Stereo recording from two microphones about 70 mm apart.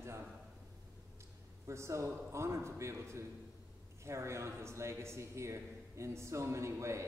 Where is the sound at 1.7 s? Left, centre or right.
Right.